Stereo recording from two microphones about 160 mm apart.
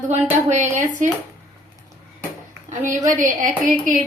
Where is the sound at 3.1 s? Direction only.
55° right (ahead or behind).